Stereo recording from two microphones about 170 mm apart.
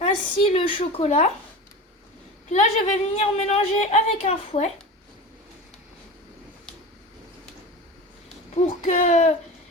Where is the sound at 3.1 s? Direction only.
40° left (ahead or behind).